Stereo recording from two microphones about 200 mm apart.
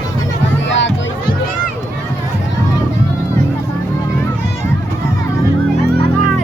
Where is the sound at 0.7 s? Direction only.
65° left (ahead or behind).